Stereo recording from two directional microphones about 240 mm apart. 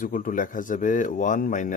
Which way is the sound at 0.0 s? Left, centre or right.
Left.